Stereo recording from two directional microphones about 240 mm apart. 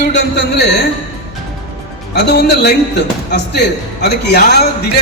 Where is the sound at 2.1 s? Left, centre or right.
Left.